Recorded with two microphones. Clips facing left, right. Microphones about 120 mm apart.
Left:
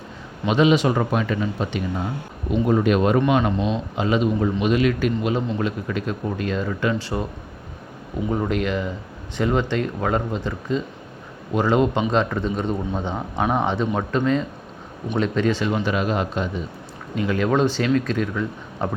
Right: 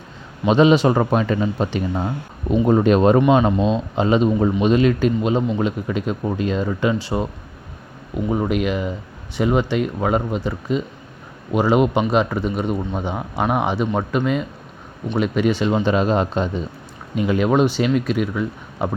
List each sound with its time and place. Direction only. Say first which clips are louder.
0.4 s speech: right 4 dB; 35° right (ahead or behind)
8.3 s a man's voice: right 2 dB; 15° right (ahead or behind)
15.7 s speech: right 4 dB; 30° right (ahead or behind)
17.2 s a man's voice: right 3 dB; 20° right (ahead or behind)